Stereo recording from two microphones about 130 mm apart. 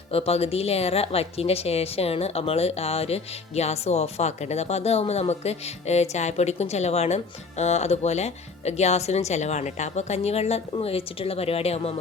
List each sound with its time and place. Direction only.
0.1 s a woman's voice: 50° left (ahead or behind)